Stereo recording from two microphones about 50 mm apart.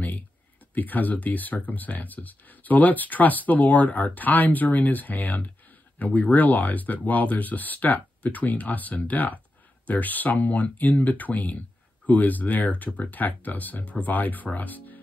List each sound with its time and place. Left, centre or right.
0.7 s speech: left